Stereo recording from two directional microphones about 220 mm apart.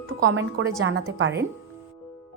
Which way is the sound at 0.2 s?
55° right (ahead or behind).